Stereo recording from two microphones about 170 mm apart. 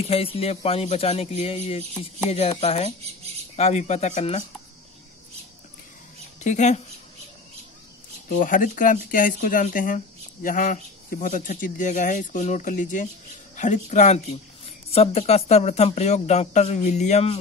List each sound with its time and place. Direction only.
0.1 s speech: 35° left (ahead or behind)
6.4 s speech: 45° left (ahead or behind)
8.3 s speech: 55° left (ahead or behind)